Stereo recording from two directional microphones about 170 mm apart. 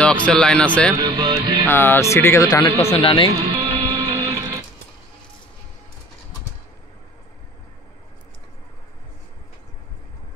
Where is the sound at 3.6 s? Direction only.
35° right (ahead or behind).